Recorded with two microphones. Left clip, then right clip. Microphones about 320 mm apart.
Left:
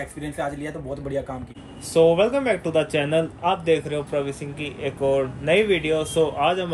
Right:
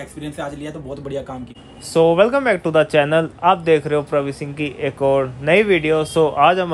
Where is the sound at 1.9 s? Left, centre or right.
Right.